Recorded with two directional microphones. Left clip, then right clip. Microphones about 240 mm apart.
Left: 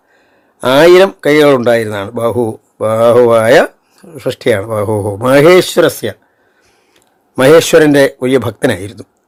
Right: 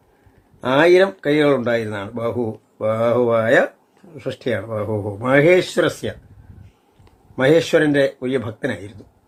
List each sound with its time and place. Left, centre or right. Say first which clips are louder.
0.6 s speech: left 8 dB; left
7.3 s speech: left 9 dB; left